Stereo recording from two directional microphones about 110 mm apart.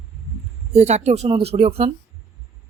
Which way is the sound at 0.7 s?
80° right.